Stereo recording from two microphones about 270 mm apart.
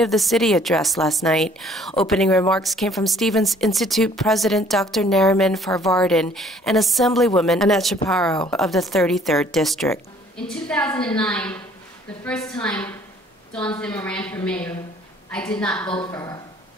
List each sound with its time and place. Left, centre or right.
0.0 s a woman's voice: centre
15.9 s speech: centre